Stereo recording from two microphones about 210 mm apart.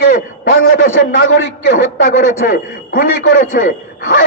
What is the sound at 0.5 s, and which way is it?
A man's voice, 65° left (ahead or behind).